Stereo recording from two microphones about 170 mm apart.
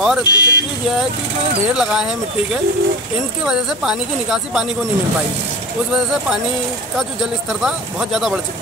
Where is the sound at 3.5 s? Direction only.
Centre (ahead or behind).